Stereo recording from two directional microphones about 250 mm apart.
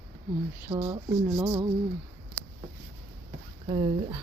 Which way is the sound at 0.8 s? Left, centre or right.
Centre.